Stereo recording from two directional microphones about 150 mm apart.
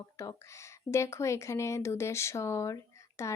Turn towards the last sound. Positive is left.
turn(degrees=20)  # may be behind; listen again after turning